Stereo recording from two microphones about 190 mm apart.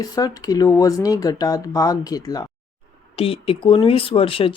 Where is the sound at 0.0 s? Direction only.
20° left (ahead or behind).